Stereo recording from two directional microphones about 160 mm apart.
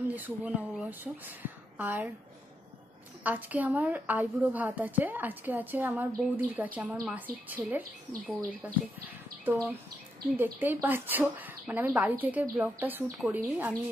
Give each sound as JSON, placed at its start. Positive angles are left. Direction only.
{"t": 0.1, "sound": "a woman's voice", "side_deg": -10}
{"t": 3.3, "sound": "a woman's voice", "side_deg": -10}
{"t": 7.6, "sound": "speech", "side_deg": -20}
{"t": 9.4, "sound": "a woman's voice", "side_deg": -10}